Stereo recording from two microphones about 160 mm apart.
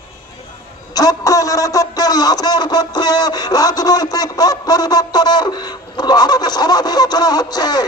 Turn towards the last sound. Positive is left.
turn(degrees=25)  # may be behind; listen again after turning